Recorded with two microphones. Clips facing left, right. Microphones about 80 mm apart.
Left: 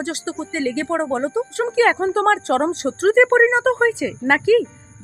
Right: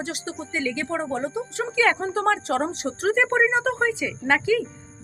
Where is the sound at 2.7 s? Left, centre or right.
Left.